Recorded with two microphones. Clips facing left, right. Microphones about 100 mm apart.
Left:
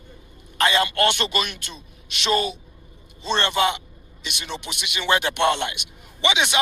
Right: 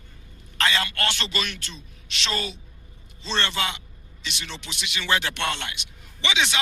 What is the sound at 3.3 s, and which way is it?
A man's voice, 20° left (ahead or behind).